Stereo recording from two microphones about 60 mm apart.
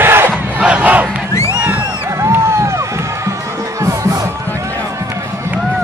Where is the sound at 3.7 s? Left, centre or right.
Right.